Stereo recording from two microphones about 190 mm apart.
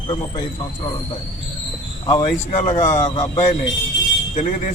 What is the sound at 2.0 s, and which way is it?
Speech, 25° left (ahead or behind).